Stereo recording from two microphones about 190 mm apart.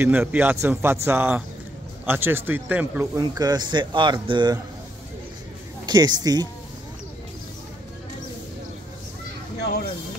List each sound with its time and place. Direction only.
0.0 s speech: 10° right (ahead or behind)
3.2 s speech: 20° right (ahead or behind)
5.9 s speech: 20° right (ahead or behind)